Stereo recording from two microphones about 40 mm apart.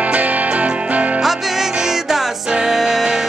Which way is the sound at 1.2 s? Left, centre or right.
Centre.